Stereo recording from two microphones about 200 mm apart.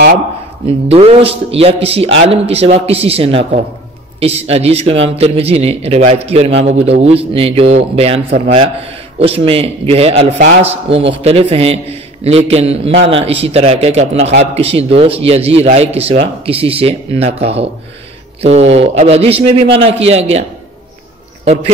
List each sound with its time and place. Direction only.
0.7 s a man's voice: 30° right (ahead or behind)